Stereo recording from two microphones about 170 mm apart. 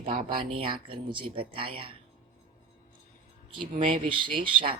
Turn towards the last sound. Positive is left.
turn(degrees=-30)  # may be behind; listen again after turning